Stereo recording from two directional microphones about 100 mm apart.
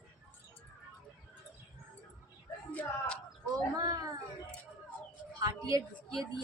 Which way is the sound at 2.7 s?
10° left (ahead or behind).